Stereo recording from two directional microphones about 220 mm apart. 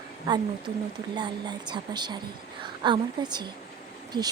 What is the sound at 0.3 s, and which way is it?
A woman's voice, 20° right (ahead or behind).